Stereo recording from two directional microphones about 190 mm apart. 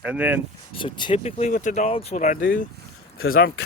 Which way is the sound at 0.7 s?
25° left (ahead or behind).